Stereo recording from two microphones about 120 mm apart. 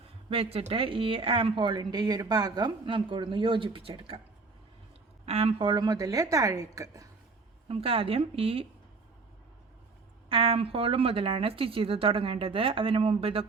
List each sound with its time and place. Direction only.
0.3 s a woman's voice: 55° right (ahead or behind)
5.2 s speech: 60° right (ahead or behind)
5.6 s a woman's voice: 35° right (ahead or behind)
7.7 s a woman's voice: 50° right (ahead or behind)
10.2 s a woman's voice: 50° right (ahead or behind)